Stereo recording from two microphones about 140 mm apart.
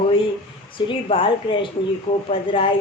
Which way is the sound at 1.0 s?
40° left (ahead or behind).